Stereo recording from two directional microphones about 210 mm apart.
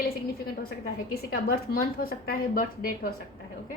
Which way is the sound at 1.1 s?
45° left (ahead or behind).